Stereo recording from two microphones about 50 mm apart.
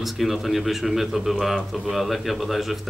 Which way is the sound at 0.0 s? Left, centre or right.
Centre.